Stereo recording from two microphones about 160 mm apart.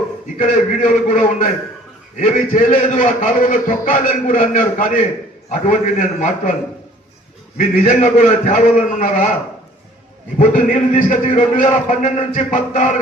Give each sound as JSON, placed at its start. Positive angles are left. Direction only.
{"t": 0.3, "sound": "a man's voice", "side_deg": 55}
{"t": 7.9, "sound": "a man's voice", "side_deg": 50}
{"t": 10.3, "sound": "a man's voice", "side_deg": 55}